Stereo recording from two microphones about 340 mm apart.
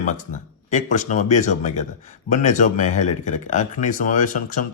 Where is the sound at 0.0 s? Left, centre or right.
Left.